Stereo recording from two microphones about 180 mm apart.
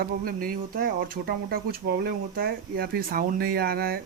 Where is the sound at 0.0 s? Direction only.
55° right (ahead or behind).